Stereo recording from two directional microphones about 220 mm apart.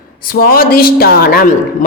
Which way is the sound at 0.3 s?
40° left (ahead or behind).